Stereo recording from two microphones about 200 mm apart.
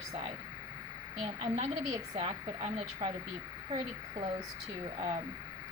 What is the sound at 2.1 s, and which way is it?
A woman's voice, 30° right (ahead or behind).